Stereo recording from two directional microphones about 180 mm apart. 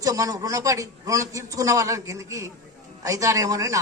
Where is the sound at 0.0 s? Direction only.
20° right (ahead or behind).